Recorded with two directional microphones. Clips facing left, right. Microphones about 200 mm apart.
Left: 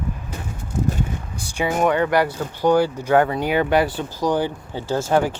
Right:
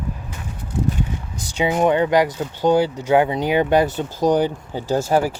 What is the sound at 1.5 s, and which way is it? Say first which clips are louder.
Speech: right 2 dB; 20° right (ahead or behind).